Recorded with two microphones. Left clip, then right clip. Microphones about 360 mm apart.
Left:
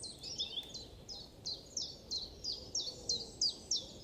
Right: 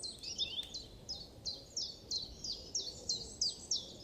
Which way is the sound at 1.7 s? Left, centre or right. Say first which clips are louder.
Right 3 dB; centre.